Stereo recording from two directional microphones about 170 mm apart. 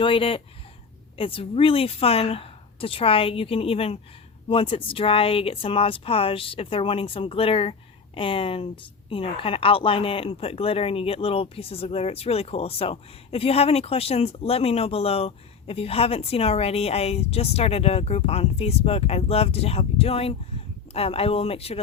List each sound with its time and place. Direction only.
0.0 s speech: 30° left (ahead or behind)